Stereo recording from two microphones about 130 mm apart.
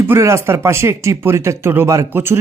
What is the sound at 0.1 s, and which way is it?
Speech, 20° right (ahead or behind).